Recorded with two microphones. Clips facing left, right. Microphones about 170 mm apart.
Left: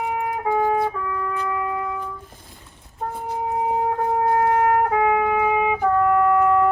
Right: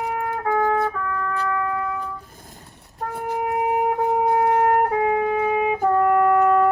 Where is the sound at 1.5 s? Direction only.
15° left (ahead or behind).